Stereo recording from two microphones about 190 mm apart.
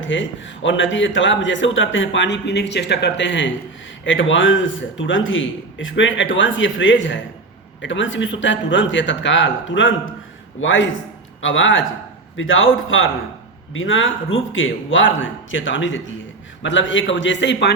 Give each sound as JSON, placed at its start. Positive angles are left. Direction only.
{"t": 0.0, "sound": "a man's voice", "side_deg": 75}